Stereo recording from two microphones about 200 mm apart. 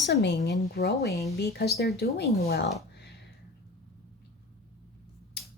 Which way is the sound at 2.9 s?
55° left (ahead or behind).